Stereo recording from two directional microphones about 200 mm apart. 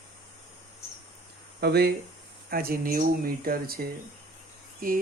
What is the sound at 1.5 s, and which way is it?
Speech, 55° right (ahead or behind).